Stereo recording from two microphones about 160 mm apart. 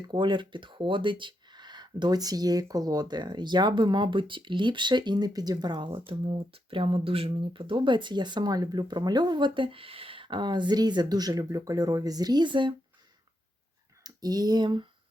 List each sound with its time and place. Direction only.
0.1 s speech: 30° right (ahead or behind)
14.0 s speech: 25° right (ahead or behind)